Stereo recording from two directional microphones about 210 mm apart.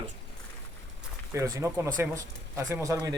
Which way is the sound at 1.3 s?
15° right (ahead or behind).